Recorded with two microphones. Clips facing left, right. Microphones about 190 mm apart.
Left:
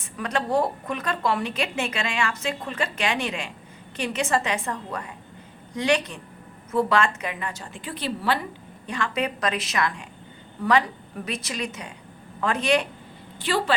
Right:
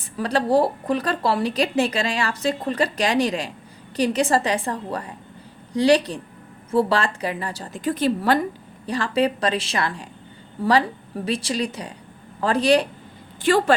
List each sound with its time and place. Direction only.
0.0 s a woman's voice: 35° right (ahead or behind)
8.9 s a woman's voice: 35° right (ahead or behind)
13.4 s a woman's voice: 45° right (ahead or behind)